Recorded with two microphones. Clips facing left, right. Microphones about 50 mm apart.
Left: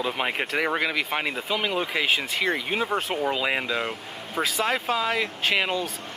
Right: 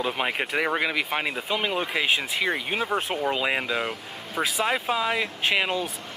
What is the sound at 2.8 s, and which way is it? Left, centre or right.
Speech, right.